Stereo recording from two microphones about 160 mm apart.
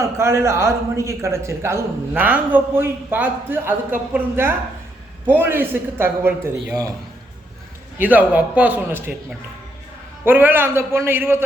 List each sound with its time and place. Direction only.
0.0 s a man's voice: 15° right (ahead or behind)
7.9 s a man's voice: 10° right (ahead or behind)
10.2 s a man's voice: 10° right (ahead or behind)